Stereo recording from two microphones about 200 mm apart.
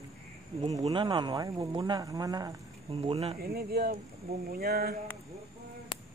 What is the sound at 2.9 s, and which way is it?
Speech, 30° right (ahead or behind).